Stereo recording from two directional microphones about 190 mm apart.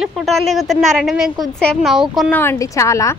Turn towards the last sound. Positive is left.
turn(degrees=15)  # may be behind; listen again after turning